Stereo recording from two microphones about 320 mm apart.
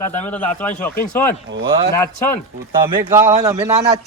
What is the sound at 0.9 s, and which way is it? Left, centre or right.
Speech, left.